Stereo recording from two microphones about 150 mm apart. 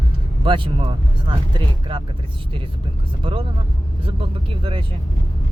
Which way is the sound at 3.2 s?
35° right (ahead or behind).